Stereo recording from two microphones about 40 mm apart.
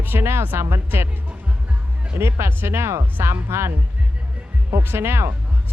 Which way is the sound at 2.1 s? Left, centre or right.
Right.